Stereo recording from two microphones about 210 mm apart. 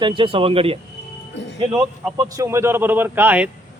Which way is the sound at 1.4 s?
55° left (ahead or behind).